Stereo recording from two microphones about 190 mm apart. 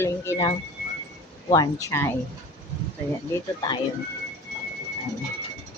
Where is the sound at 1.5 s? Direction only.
20° left (ahead or behind).